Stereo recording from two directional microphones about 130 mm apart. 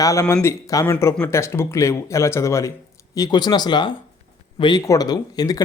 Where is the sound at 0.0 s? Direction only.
25° left (ahead or behind).